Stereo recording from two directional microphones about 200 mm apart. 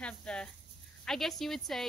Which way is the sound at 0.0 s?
5° left (ahead or behind).